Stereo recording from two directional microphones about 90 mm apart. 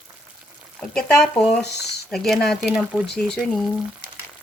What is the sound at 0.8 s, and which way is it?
Speech, 5° left (ahead or behind).